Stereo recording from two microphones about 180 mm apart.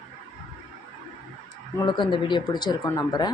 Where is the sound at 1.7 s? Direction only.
25° left (ahead or behind).